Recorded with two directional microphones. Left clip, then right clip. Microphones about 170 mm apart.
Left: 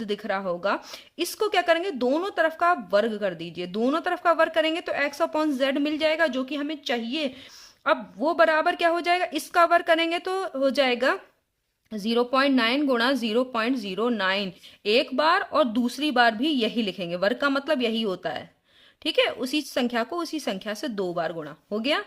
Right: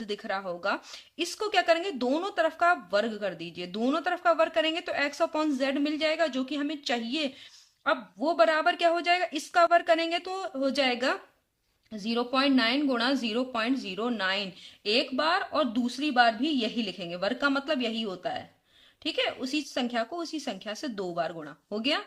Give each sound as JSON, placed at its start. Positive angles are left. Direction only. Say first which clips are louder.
{"t": 0.0, "sound": "speech", "louder": "left 5 dB", "side_deg": 30}